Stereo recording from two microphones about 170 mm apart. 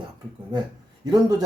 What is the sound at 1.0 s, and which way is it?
Speech, 20° right (ahead or behind).